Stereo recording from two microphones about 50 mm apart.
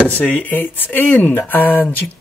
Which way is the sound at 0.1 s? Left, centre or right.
Left.